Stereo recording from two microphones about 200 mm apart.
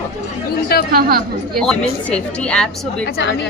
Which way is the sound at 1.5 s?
Centre (ahead or behind).